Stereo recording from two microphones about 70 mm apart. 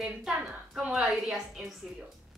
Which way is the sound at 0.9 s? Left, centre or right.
Centre.